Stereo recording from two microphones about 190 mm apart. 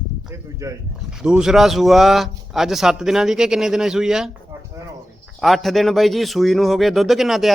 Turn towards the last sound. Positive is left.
turn(degrees=0)  # may be behind; listen again after turning